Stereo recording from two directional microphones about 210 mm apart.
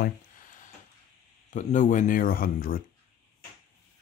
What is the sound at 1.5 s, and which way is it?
Speech, 35° left (ahead or behind).